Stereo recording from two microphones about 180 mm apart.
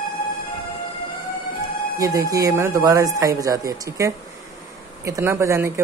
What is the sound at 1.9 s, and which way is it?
Speech, 20° right (ahead or behind).